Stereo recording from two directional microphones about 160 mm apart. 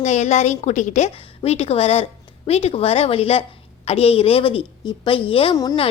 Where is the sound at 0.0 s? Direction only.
45° left (ahead or behind).